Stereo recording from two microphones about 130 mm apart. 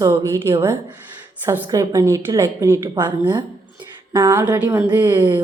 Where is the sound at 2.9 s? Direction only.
35° right (ahead or behind).